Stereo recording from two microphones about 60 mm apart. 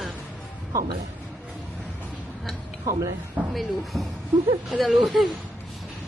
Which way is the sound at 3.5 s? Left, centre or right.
Centre.